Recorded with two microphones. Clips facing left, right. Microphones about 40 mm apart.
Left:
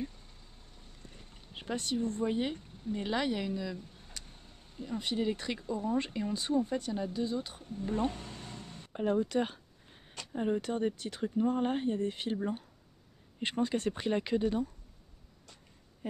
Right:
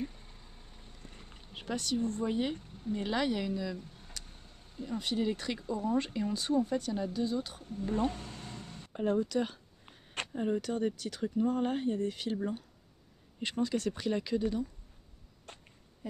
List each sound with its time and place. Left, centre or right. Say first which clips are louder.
0.0 s vehicle: right 1 dB; centre
1.5 s a sound: even; centre
2.0 s speech: even; centre
10.3 s speech: left 1 dB; centre
13.4 s speech: left 1 dB; left
15.5 s a sound: right 7 dB; right